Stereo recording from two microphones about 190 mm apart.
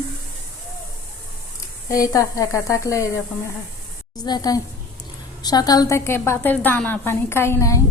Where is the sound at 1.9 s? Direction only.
15° left (ahead or behind).